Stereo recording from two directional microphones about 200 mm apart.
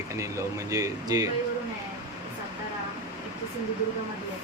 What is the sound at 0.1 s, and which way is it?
Speech, 15° right (ahead or behind).